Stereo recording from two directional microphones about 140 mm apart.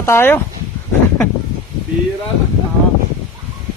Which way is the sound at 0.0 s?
15° left (ahead or behind).